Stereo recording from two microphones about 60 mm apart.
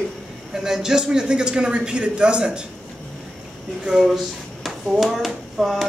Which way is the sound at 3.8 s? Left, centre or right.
Centre.